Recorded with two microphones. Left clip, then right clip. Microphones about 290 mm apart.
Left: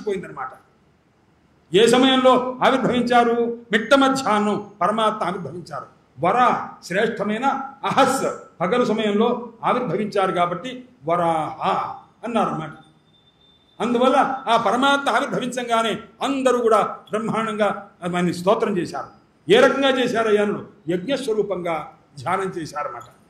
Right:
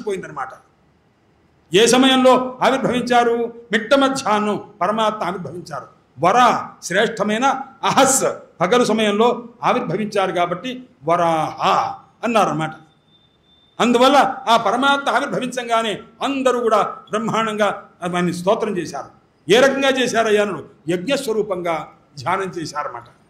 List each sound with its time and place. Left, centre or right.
0.0 s speech: centre
1.7 s a man's voice: centre
13.7 s a man's voice: centre
14.4 s a man's voice: centre
18.1 s a man's voice: centre